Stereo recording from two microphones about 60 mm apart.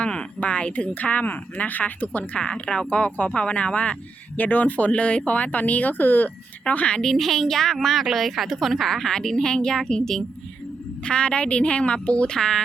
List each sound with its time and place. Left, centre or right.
0.0 s a woman's voice: centre
2.4 s speech: centre
7.0 s a woman's voice: centre; by 12.4 s left
12.4 s a woman's voice: centre